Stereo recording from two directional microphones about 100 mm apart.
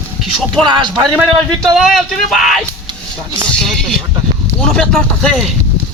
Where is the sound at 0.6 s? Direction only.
50° right (ahead or behind).